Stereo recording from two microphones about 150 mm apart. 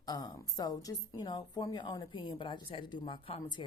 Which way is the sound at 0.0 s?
25° left (ahead or behind).